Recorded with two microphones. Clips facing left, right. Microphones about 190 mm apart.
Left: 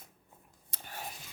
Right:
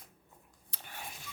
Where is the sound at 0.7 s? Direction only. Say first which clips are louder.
Left 2 dB; 45° left (ahead or behind).